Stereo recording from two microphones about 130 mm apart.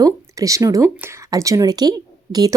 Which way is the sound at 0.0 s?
25° right (ahead or behind).